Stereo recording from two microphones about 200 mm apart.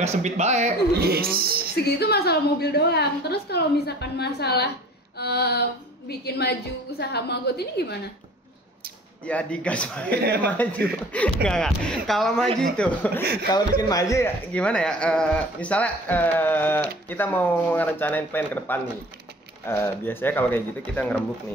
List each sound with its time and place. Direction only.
0.0 s a man's voice: 35° right (ahead or behind)
0.9 s speech: 50° right (ahead or behind)
1.9 s a woman's voice: 55° left (ahead or behind)
9.2 s speech: 5° left (ahead or behind)
10.2 s speech: 55° right (ahead or behind)
11.1 s speech: 5° left (ahead or behind)
13.2 s speech: 50° right (ahead or behind)
13.5 s speech: 20° left (ahead or behind)